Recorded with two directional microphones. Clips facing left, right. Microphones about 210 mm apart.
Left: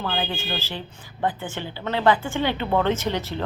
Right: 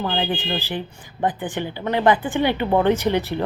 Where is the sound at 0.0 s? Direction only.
20° right (ahead or behind).